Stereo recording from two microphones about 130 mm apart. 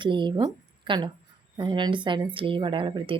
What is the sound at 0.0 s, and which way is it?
Speech, 40° right (ahead or behind).